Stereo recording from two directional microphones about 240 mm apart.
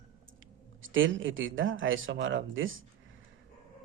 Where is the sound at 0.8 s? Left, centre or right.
Right.